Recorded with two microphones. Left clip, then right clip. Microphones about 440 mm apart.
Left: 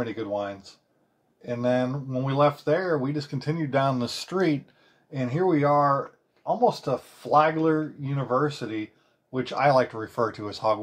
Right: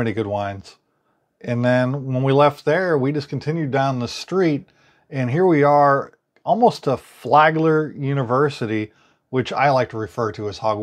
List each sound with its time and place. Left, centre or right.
0.0 s speech: right
5.1 s speech: right
9.7 s speech: right